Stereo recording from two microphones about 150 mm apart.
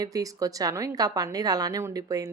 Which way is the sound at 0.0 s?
25° right (ahead or behind).